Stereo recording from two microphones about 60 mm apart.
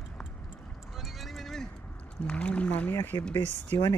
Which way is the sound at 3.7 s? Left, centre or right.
Left.